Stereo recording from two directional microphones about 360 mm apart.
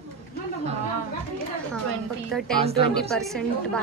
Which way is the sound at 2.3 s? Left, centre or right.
Centre.